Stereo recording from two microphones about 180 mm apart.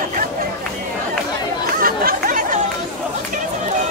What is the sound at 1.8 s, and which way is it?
Chatter, 55° right (ahead or behind).